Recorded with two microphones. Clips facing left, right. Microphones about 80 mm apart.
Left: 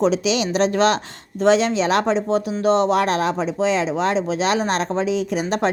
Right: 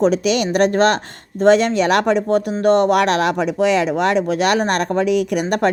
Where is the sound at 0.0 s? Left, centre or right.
Right.